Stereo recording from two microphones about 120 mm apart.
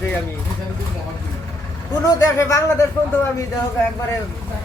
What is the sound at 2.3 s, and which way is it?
Speech, 25° left (ahead or behind).